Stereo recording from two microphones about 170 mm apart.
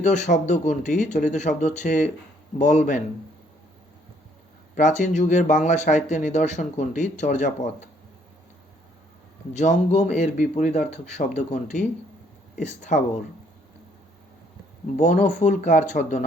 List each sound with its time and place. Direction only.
0.0 s speech: 45° left (ahead or behind)
4.8 s speech: 45° left (ahead or behind)
9.5 s speech: 45° left (ahead or behind)
14.9 s speech: 45° left (ahead or behind)